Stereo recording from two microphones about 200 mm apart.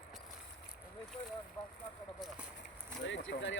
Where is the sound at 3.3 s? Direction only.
45° left (ahead or behind).